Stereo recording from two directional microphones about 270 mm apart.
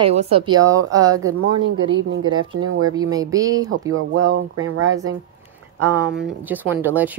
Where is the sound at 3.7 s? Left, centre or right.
Right.